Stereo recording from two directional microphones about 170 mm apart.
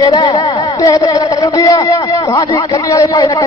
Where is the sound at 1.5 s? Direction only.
20° left (ahead or behind).